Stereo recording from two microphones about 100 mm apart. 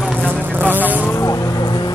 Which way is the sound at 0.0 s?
5° left (ahead or behind).